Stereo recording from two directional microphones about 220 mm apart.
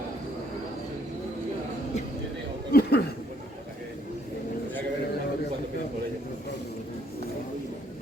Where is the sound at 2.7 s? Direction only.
45° left (ahead or behind).